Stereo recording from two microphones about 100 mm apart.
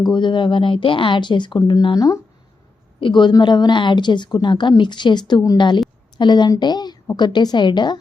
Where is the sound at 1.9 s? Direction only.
35° left (ahead or behind).